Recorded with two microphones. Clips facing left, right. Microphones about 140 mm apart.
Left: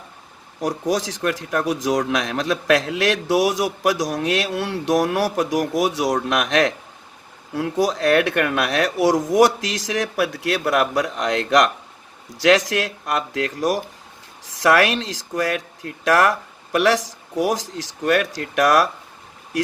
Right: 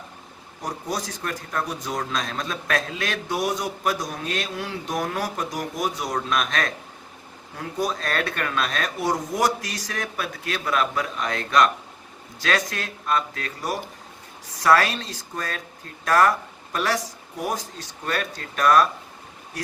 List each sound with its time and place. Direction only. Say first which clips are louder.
0.6 s a man's voice: left 8 dB; 90° left
8.4 s a man's voice: left 7 dB; 75° left (ahead or behind); by 18.9 s 90° left